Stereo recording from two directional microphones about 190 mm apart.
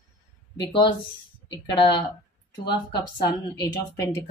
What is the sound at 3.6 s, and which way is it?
Speech, 15° left (ahead or behind).